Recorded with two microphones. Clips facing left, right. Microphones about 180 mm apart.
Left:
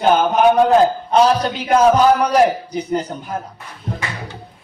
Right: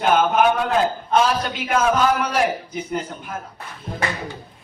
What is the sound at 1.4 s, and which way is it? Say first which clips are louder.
A man's voice: left 7 dB; 35° left (ahead or behind).